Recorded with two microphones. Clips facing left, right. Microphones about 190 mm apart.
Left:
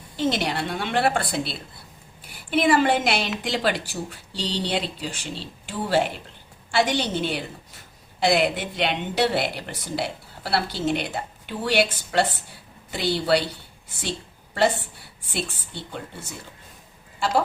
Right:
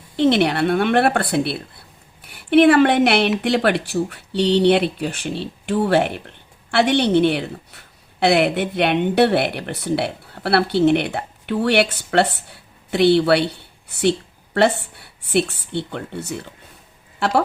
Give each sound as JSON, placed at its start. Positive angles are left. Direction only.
{"t": 0.2, "sound": "speech", "side_deg": -65}
{"t": 17.2, "sound": "speech", "side_deg": -65}